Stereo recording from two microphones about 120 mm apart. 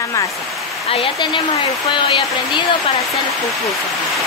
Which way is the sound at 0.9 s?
50° left (ahead or behind).